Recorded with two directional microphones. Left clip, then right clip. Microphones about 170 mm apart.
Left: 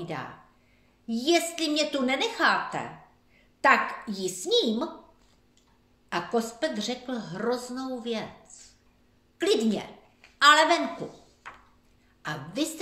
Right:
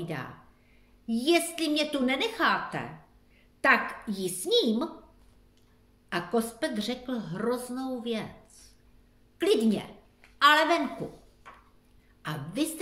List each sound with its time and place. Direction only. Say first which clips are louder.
0.0 s a woman's voice: left 2 dB; 15° right (ahead or behind)
6.0 s a woman's voice: left 1 dB; 15° right (ahead or behind)
9.4 s a woman's voice: even; 15° right (ahead or behind)
12.2 s a woman's voice: left 1 dB; 15° right (ahead or behind)